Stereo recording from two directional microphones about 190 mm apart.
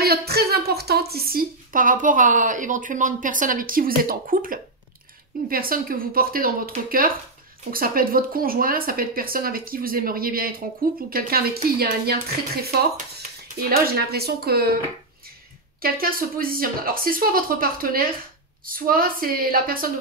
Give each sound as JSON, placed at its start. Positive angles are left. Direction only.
{"t": 0.0, "sound": "a woman's voice", "side_deg": -55}
{"t": 13.7, "sound": "speech", "side_deg": -50}
{"t": 15.8, "sound": "speech", "side_deg": -50}